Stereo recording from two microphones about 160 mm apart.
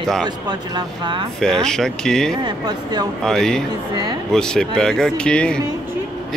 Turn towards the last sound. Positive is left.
turn(degrees=5)  # may be behind; listen again after turning